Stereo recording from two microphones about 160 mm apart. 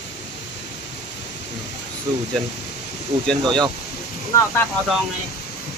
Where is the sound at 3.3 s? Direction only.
5° left (ahead or behind).